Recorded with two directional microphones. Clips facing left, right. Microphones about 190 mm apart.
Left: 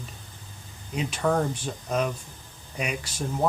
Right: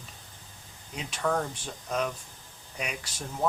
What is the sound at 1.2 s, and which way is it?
Speech, 25° left (ahead or behind).